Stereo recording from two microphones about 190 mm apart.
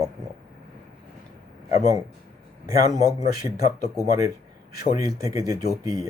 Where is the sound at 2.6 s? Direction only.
15° right (ahead or behind).